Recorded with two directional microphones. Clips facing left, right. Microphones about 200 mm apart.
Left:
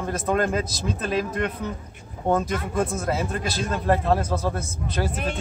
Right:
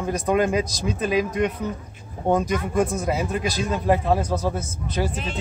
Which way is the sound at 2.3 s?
10° right (ahead or behind).